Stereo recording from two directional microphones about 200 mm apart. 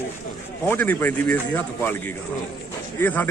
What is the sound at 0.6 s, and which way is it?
Speech, 10° left (ahead or behind).